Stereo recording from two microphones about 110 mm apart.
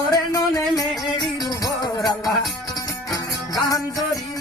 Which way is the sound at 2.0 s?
Centre (ahead or behind).